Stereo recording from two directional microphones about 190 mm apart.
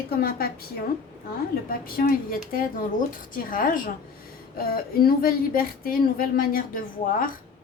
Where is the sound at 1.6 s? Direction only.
50° left (ahead or behind).